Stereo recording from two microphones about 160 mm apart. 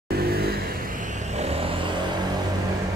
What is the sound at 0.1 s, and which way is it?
Vehicle, 75° right (ahead or behind).